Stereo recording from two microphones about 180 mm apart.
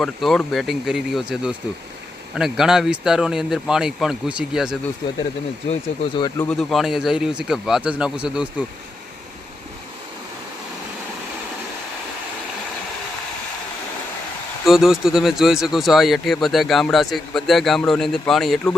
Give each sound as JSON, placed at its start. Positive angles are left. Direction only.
{"t": 0.0, "sound": "speech", "side_deg": 0}
{"t": 6.1, "sound": "speech", "side_deg": 20}
{"t": 6.5, "sound": "speech", "side_deg": 0}
{"t": 14.6, "sound": "speech", "side_deg": 0}